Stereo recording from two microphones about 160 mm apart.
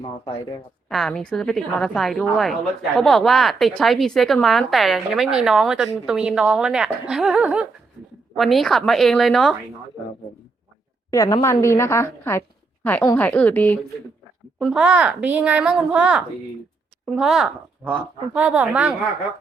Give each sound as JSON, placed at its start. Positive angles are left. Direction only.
{"t": 0.9, "sound": "a woman's voice", "side_deg": 0}
{"t": 11.1, "sound": "a woman's voice", "side_deg": 20}
{"t": 14.6, "sound": "a woman's voice", "side_deg": -5}